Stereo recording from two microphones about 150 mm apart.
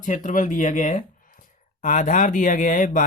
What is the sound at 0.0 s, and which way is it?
Speech, 60° left (ahead or behind).